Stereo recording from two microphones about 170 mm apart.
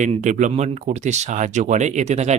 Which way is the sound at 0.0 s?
45° right (ahead or behind).